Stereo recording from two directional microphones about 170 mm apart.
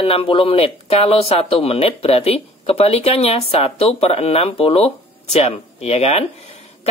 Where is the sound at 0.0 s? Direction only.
35° left (ahead or behind).